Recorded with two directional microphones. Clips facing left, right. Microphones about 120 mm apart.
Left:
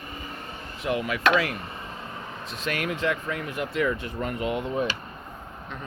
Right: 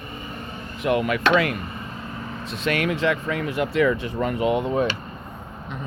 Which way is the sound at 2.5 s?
75° right (ahead or behind).